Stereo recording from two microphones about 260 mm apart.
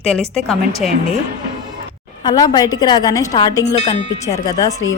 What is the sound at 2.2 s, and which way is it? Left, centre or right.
A woman's voice, centre.